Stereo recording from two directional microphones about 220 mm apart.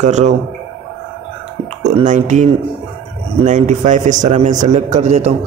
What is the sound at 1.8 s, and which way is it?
Speech, 35° right (ahead or behind).